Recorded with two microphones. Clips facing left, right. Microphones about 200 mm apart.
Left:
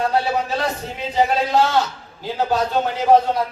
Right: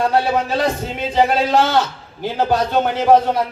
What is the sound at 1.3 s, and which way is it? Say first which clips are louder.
A man's voice: right 2 dB; 70° right (ahead or behind).